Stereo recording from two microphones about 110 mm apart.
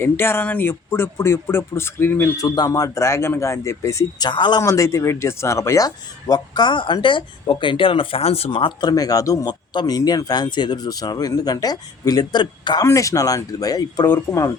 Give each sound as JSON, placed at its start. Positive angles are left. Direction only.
{"t": 0.0, "sound": "speech", "side_deg": 20}
{"t": 2.4, "sound": "speech", "side_deg": 30}
{"t": 4.6, "sound": "speech", "side_deg": 30}
{"t": 12.8, "sound": "speech", "side_deg": 30}